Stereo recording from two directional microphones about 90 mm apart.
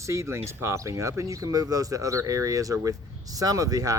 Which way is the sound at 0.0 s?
35° right (ahead or behind).